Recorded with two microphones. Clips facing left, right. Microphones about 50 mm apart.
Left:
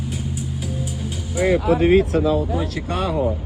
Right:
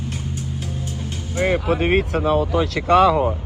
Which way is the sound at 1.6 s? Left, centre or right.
Right.